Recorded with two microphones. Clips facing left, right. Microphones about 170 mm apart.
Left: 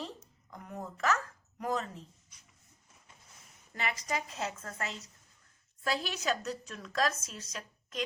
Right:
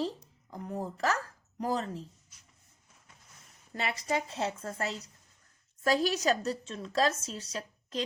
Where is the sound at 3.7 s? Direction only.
30° right (ahead or behind).